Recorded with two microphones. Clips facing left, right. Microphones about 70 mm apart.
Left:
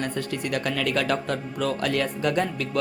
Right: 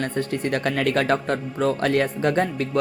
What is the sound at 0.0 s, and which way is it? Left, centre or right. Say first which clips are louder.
Speech: right 4 dB; right.